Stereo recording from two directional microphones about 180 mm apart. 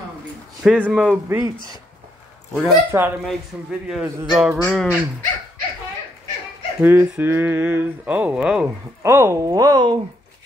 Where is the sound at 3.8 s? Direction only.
5° right (ahead or behind).